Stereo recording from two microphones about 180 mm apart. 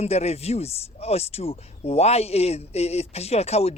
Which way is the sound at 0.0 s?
35° left (ahead or behind).